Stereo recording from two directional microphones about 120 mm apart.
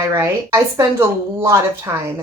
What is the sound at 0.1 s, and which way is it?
A woman's voice, 25° right (ahead or behind).